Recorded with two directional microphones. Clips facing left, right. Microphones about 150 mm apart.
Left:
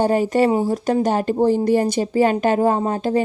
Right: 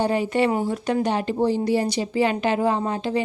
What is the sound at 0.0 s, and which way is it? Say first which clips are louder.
A woman's voice: left 4 dB; 45° left (ahead or behind).